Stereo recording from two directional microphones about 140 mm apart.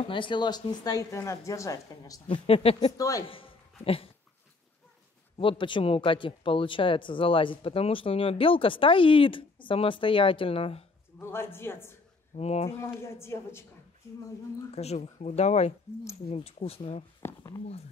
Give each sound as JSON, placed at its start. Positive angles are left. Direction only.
{"t": 0.0, "sound": "speech", "side_deg": 35}
{"t": 2.2, "sound": "speech", "side_deg": 40}
{"t": 3.0, "sound": "speech", "side_deg": 25}
{"t": 3.3, "sound": "a sound", "side_deg": 40}
{"t": 5.4, "sound": "speech", "side_deg": 35}
{"t": 11.1, "sound": "speech", "side_deg": 15}
{"t": 12.4, "sound": "speech", "side_deg": 45}
{"t": 12.8, "sound": "speech", "side_deg": 20}
{"t": 14.8, "sound": "speech", "side_deg": 50}
{"t": 17.2, "sound": "speech", "side_deg": 15}